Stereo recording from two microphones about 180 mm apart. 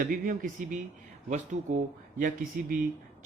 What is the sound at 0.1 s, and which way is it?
A man's voice, 50° right (ahead or behind).